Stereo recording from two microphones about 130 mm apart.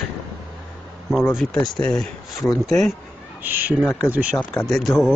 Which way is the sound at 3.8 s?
20° left (ahead or behind).